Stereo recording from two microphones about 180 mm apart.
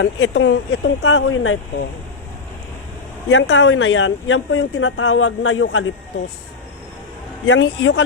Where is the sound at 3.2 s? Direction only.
90° left.